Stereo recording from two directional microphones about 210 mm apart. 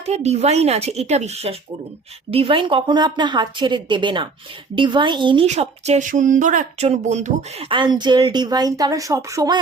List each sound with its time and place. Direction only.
0.0 s a woman's voice: 30° right (ahead or behind)